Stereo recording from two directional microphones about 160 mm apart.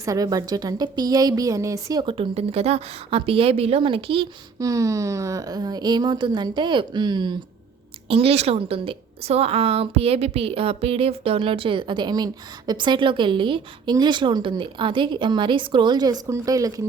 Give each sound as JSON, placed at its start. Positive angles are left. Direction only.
{"t": 0.0, "sound": "a woman's voice", "side_deg": -20}
{"t": 4.6, "sound": "a woman's voice", "side_deg": -20}
{"t": 8.1, "sound": "a woman's voice", "side_deg": -40}